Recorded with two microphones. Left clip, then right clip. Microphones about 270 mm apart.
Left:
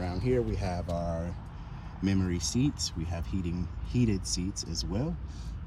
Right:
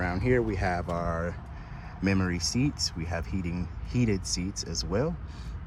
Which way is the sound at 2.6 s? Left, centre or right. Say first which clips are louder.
Right 2 dB; centre.